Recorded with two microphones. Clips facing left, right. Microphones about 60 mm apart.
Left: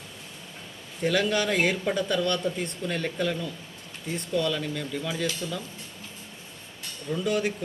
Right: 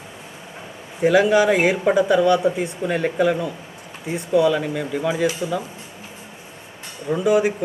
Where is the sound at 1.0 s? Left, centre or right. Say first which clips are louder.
Right 10 dB; centre.